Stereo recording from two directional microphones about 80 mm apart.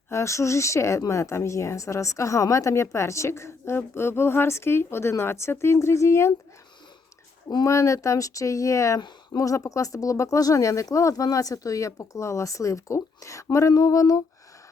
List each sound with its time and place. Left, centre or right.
0.1 s a woman's voice: left
7.6 s a woman's voice: left
9.0 s speech: left
9.4 s speech: left